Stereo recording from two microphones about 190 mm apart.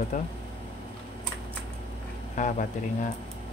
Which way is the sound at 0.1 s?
45° left (ahead or behind).